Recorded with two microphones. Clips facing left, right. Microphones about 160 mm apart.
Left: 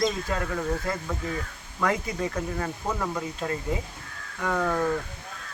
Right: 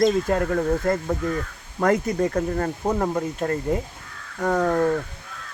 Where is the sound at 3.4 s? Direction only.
50° right (ahead or behind).